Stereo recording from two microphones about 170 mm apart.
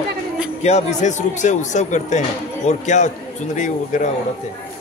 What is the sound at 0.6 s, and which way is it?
Speech, 40° left (ahead or behind).